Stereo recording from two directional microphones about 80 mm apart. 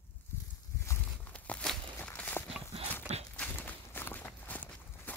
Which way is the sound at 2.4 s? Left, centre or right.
Left.